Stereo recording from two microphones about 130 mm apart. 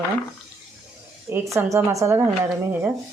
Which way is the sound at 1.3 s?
20° right (ahead or behind).